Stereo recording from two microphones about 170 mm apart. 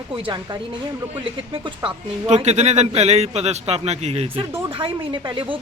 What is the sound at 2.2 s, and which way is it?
A man's voice, 40° right (ahead or behind).